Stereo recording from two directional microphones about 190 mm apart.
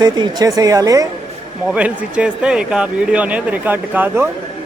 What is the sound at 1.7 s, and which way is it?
Speech, 5° right (ahead or behind).